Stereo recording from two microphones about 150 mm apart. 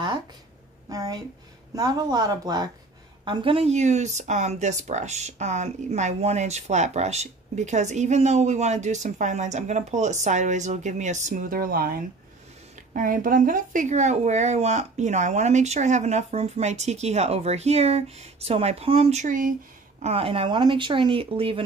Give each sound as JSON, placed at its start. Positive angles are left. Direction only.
{"t": 0.8, "sound": "speech", "side_deg": -25}
{"t": 3.3, "sound": "speech", "side_deg": -35}
{"t": 12.7, "sound": "speech", "side_deg": -60}
{"t": 20.0, "sound": "speech", "side_deg": -40}